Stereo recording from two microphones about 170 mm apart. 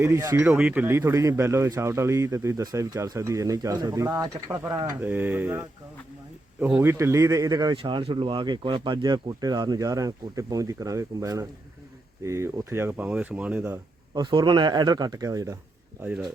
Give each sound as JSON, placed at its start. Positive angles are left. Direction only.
{"t": 0.0, "sound": "speech", "side_deg": -15}
{"t": 14.2, "sound": "speech", "side_deg": -25}
{"t": 16.0, "sound": "speech", "side_deg": -10}